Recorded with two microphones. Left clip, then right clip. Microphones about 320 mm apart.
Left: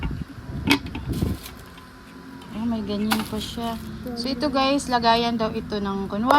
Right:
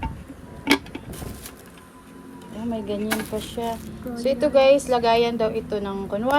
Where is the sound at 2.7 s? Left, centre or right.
Centre.